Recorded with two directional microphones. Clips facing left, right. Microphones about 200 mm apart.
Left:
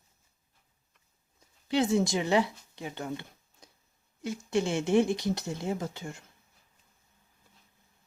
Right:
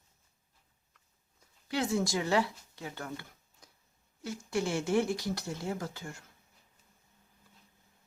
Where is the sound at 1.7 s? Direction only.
20° left (ahead or behind).